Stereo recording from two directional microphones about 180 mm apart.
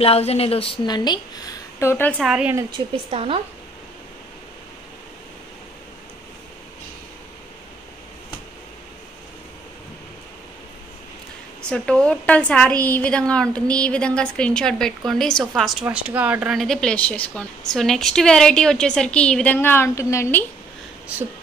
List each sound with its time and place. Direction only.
0.0 s a woman's voice: 35° left (ahead or behind); by 2.1 s 15° left (ahead or behind)
2.1 s speech: 5° right (ahead or behind)
3.1 s speech: 30° right (ahead or behind)
11.7 s speech: 5° left (ahead or behind)